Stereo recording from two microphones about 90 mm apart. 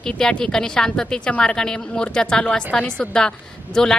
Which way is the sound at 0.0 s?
5° left (ahead or behind).